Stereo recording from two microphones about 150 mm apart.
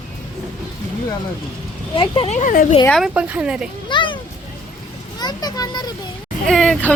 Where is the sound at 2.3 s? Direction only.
65° left (ahead or behind).